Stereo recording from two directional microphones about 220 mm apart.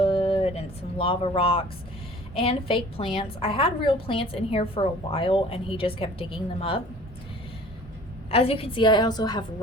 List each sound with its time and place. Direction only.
0.0 s a sound: 25° left (ahead or behind)
2.3 s a woman's voice: 25° left (ahead or behind)
8.3 s a woman's voice: 25° left (ahead or behind)